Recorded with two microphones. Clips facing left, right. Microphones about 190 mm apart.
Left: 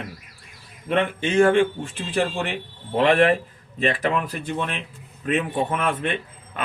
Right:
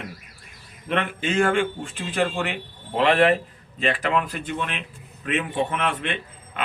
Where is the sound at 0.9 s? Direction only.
20° left (ahead or behind).